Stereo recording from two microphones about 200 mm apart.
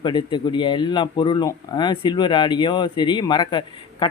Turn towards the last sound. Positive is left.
turn(degrees=25)  # may be behind; listen again after turning